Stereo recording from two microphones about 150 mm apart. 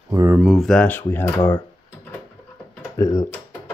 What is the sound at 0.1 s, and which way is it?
Speech, 20° right (ahead or behind).